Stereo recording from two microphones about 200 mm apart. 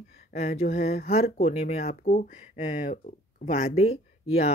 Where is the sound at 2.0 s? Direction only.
45° left (ahead or behind).